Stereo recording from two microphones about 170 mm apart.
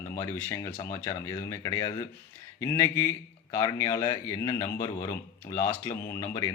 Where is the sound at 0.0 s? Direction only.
15° left (ahead or behind).